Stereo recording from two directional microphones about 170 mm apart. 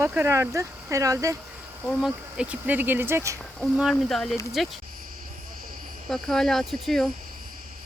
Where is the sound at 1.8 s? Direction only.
5° right (ahead or behind).